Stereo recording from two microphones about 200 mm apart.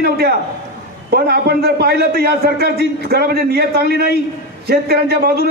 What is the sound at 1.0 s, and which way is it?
A man's voice, 50° right (ahead or behind).